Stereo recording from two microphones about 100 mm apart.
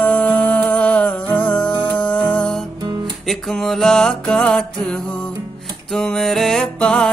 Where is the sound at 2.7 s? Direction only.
45° right (ahead or behind).